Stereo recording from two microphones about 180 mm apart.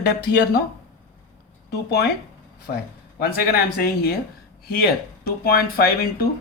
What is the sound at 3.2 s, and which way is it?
Speech, 55° left (ahead or behind).